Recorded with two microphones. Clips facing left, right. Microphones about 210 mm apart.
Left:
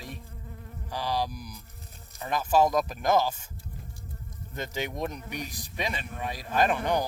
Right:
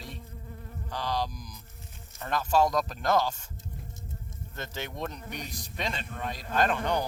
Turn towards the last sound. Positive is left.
turn(degrees=10)  # may be behind; listen again after turning